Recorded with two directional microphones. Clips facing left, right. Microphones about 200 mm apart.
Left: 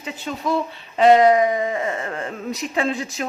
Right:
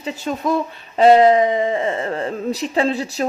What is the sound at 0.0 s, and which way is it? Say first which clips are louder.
Speech: right 4 dB; 45° right (ahead or behind).